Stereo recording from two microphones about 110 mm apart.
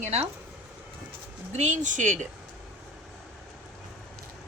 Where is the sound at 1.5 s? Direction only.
90° right.